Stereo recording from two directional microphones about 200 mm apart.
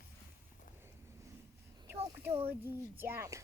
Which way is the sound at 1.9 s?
10° right (ahead or behind).